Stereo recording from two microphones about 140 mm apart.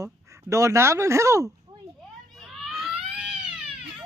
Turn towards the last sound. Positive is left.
turn(degrees=-5)  # may be behind; listen again after turning